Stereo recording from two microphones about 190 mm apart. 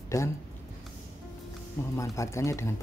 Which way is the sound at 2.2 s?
15° left (ahead or behind).